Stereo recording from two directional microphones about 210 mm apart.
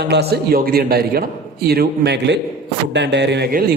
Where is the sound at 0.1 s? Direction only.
50° right (ahead or behind).